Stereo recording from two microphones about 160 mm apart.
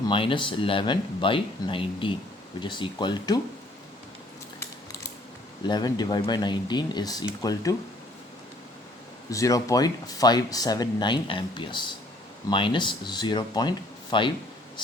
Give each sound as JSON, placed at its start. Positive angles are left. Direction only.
{"t": 0.1, "sound": "speech", "side_deg": 30}
{"t": 5.6, "sound": "speech", "side_deg": 25}
{"t": 9.3, "sound": "speech", "side_deg": 20}